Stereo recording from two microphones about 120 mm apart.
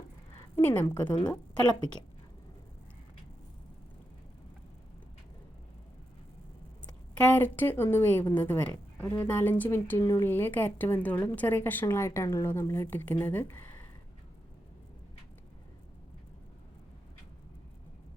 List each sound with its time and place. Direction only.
0.5 s speech: 15° left (ahead or behind)
7.2 s speech: 15° left (ahead or behind)
10.0 s a woman's voice: 30° left (ahead or behind)
10.2 s speech: 20° left (ahead or behind)